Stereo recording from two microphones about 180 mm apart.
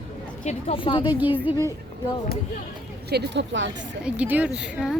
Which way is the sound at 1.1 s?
10° right (ahead or behind).